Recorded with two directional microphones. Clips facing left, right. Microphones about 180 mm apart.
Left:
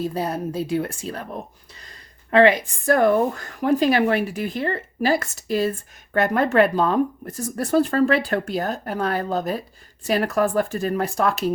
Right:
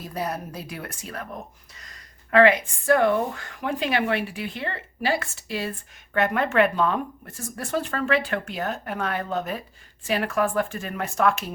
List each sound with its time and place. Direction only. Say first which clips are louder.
0.0 s speech: left 6 dB; 30° left (ahead or behind)